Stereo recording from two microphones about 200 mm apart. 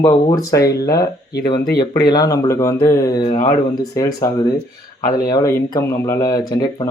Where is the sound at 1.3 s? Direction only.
50° left (ahead or behind).